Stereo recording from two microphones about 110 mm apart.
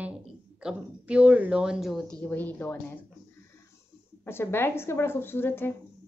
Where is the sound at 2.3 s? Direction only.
15° left (ahead or behind).